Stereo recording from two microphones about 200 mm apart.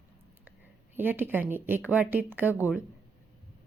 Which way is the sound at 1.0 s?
10° right (ahead or behind).